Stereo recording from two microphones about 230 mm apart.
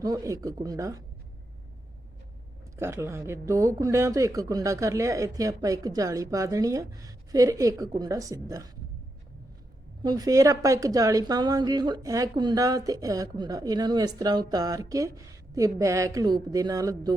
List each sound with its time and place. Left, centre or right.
0.0 s a woman's voice: centre
2.7 s a woman's voice: centre
10.0 s a woman's voice: centre